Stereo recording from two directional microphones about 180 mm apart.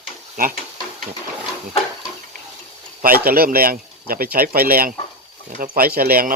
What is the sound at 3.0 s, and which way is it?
Speech, 55° right (ahead or behind).